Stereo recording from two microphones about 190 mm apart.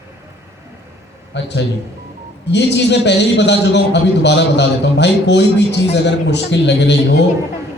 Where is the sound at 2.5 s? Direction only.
65° left (ahead or behind).